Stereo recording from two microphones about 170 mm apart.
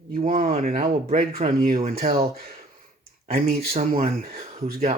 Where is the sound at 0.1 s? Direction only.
55° right (ahead or behind).